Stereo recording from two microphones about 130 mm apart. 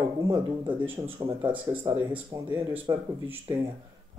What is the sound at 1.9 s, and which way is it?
Speech, 25° right (ahead or behind).